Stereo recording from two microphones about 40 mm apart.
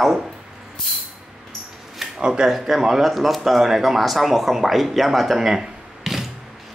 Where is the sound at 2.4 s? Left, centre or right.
Centre.